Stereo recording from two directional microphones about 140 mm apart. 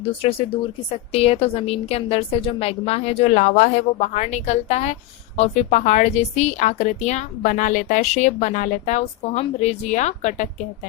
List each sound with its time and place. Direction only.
0.2 s a woman's voice: 40° left (ahead or behind); by 10.5 s 60° left (ahead or behind)